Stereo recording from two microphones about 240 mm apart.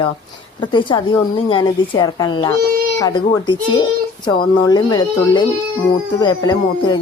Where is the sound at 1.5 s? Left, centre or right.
Centre.